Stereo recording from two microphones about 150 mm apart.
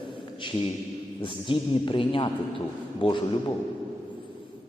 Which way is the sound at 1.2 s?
35° left (ahead or behind).